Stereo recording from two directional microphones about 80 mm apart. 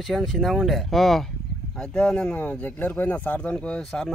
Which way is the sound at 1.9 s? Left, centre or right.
Centre.